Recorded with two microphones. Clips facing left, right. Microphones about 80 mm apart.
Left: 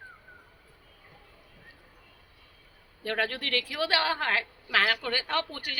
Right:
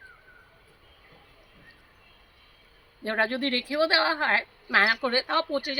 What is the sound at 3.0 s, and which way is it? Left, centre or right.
A woman's voice, right.